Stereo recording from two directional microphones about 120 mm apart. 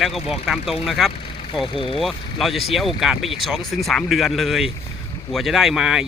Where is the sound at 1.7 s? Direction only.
50° left (ahead or behind).